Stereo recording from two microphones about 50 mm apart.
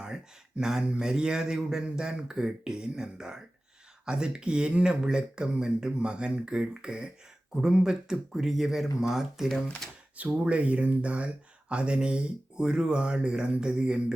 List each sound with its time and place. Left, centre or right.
0.0 s speech: centre
10.2 s speech: right